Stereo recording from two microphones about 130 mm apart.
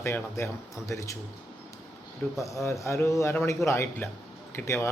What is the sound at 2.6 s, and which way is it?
A man's voice, 20° left (ahead or behind).